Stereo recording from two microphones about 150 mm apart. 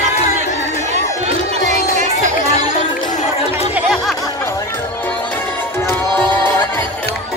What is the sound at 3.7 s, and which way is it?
Music, centre (ahead or behind).